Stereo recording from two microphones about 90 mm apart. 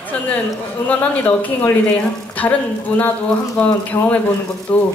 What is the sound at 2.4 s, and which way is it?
Speech, 20° left (ahead or behind).